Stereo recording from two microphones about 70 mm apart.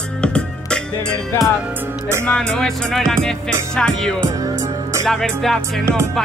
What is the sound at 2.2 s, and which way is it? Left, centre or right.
Music, centre.